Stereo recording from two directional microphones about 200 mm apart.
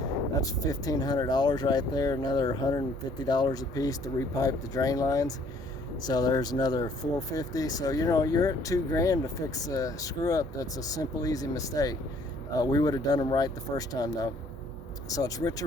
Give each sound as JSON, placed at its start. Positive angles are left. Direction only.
{"t": 0.3, "sound": "speech", "side_deg": 15}
{"t": 15.1, "sound": "speech", "side_deg": 20}